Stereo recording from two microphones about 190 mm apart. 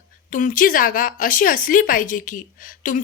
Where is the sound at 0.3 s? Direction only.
45° left (ahead or behind).